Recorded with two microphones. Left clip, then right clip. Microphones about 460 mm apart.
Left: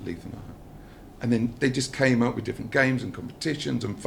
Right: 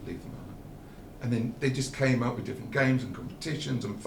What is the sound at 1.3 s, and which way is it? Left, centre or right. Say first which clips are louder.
Speech: left 6 dB; left.